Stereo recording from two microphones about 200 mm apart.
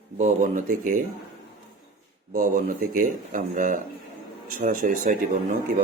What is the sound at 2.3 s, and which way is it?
Speech, 40° right (ahead or behind).